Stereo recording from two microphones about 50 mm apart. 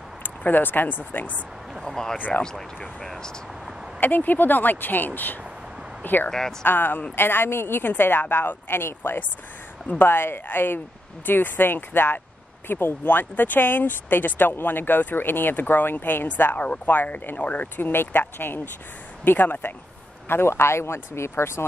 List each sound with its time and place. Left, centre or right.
0.4 s speech: left
1.9 s speech: centre
2.1 s speech: left
2.4 s speech: centre
4.0 s speech: left
20.2 s speech: left